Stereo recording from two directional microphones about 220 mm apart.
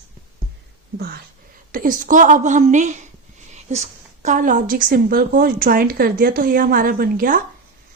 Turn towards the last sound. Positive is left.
turn(degrees=-40)  # may be behind; listen again after turning